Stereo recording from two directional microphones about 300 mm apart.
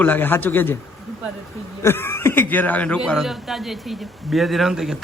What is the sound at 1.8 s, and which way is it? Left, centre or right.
A man's voice, centre.